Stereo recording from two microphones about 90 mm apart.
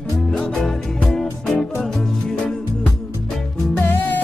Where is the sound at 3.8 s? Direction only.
25° left (ahead or behind).